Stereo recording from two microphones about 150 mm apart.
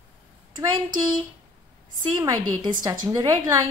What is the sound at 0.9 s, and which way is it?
A woman's voice, 30° right (ahead or behind).